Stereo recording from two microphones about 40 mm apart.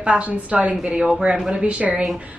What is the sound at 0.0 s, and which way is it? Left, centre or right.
A woman's voice, right.